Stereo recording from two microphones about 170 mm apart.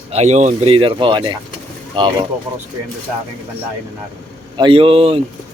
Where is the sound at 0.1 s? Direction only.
40° right (ahead or behind).